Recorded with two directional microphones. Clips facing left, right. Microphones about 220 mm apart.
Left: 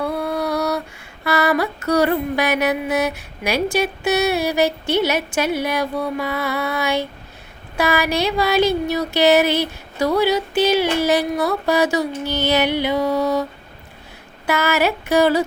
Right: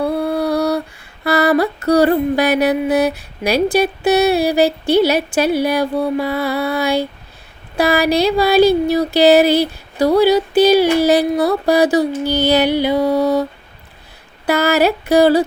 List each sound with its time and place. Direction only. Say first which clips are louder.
0.0 s lullaby: right 5 dB; 30° right (ahead or behind)
1.2 s mantra: right 5 dB; 35° right (ahead or behind)
14.4 s mantra: right 5 dB; 35° right (ahead or behind)